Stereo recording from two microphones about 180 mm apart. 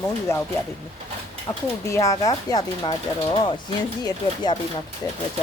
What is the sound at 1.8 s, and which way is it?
Speech, 15° left (ahead or behind).